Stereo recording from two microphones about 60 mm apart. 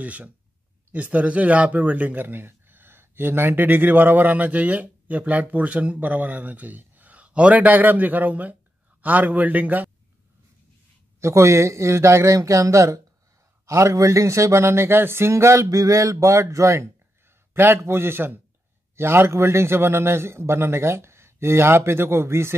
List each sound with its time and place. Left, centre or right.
0.0 s speech: right
11.1 s speech: right
17.6 s a man's voice: right